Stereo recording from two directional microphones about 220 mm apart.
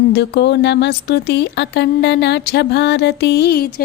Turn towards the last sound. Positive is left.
turn(degrees=45)  # may be behind; listen again after turning